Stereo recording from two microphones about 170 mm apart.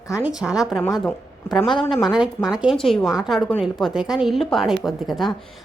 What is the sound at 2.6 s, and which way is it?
Speech, centre (ahead or behind).